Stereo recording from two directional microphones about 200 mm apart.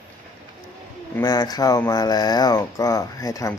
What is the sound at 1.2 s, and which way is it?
Speech, 20° left (ahead or behind).